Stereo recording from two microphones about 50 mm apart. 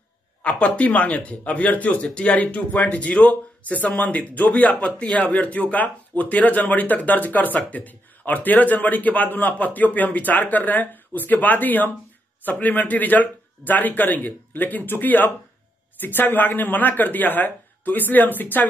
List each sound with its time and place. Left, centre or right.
0.4 s a man's voice: left